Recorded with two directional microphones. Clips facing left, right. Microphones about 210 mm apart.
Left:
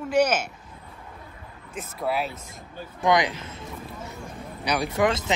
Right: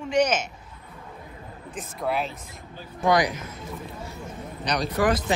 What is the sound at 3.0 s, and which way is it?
Speech, 20° left (ahead or behind).